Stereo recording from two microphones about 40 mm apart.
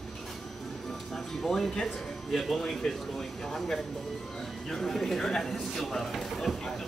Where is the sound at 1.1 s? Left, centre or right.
Centre.